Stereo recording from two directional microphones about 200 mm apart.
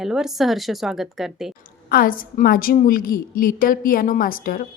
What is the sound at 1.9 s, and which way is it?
A woman's voice, 45° left (ahead or behind).